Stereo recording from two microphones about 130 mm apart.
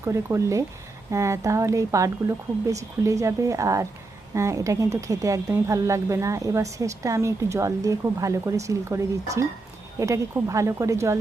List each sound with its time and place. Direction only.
0.0 s a woman's voice: 20° right (ahead or behind)